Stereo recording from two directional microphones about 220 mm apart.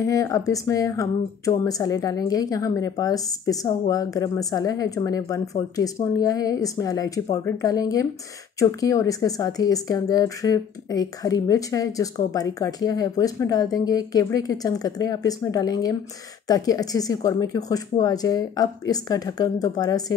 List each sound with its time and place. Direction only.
0.0 s speech: 15° left (ahead or behind)